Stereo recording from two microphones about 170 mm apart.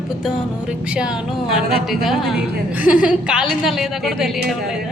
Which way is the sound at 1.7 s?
Centre (ahead or behind).